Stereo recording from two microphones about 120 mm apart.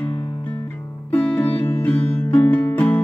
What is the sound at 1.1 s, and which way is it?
Music, 10° left (ahead or behind).